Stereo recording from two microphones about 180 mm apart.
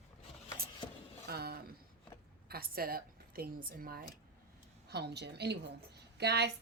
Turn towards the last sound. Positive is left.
turn(degrees=-65)  # may be behind; listen again after turning